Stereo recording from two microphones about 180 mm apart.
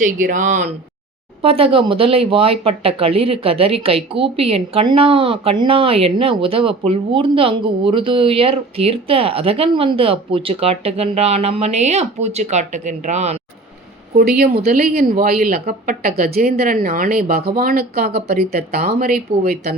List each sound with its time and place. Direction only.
0.0 s speech: 45° right (ahead or behind)
1.4 s speech: 30° right (ahead or behind)
14.2 s speech: 60° right (ahead or behind)